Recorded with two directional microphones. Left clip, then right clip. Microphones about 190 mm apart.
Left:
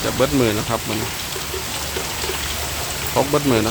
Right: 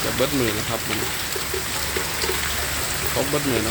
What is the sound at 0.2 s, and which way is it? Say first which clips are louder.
Speech: left 4 dB; 15° left (ahead or behind).